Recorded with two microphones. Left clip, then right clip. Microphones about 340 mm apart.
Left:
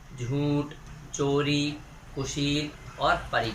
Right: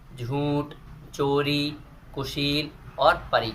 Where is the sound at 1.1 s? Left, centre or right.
Centre.